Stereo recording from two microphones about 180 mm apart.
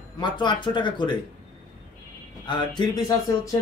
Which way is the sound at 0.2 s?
25° left (ahead or behind).